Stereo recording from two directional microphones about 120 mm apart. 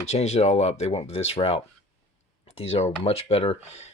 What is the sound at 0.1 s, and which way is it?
Speech, 65° left (ahead or behind).